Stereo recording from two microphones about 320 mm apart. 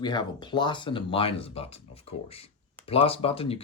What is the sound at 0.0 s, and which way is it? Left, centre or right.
Speech, centre.